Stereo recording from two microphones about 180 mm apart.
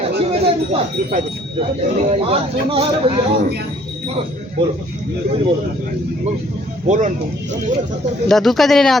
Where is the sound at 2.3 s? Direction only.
30° right (ahead or behind).